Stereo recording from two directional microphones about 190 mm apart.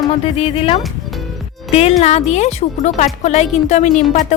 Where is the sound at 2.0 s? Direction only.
35° left (ahead or behind).